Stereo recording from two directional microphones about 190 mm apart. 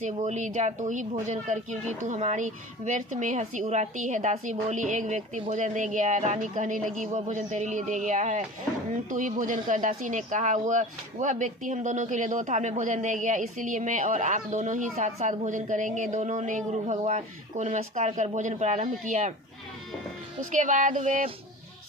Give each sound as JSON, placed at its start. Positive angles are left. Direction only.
{"t": 0.0, "sound": "a woman's voice", "side_deg": -40}
{"t": 20.5, "sound": "a woman's voice", "side_deg": -40}